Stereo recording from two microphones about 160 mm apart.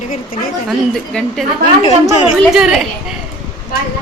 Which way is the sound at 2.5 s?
5° right (ahead or behind).